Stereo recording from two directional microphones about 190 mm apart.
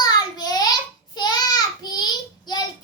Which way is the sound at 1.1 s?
20° left (ahead or behind).